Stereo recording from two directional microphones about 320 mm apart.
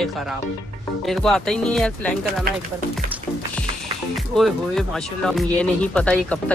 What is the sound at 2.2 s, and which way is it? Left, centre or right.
Speech, right.